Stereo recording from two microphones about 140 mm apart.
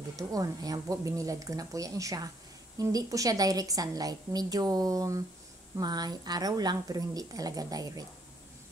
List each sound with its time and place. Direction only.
0.1 s a woman's voice: 25° right (ahead or behind)